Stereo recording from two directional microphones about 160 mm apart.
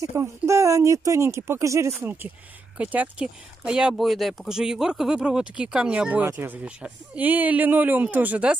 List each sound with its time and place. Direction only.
0.0 s speech: 15° right (ahead or behind)